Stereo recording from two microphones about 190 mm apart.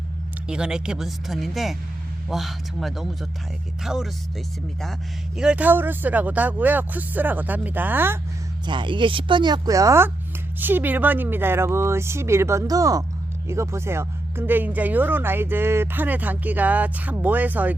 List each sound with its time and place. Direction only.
0.4 s speech: 5° right (ahead or behind)
5.4 s speech: 5° right (ahead or behind)
8.6 s speech: 25° right (ahead or behind); by 17.7 s 10° right (ahead or behind)